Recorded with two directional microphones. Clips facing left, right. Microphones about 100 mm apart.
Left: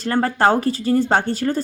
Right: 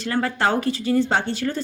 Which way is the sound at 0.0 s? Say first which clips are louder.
Left 5 dB; 40° left (ahead or behind).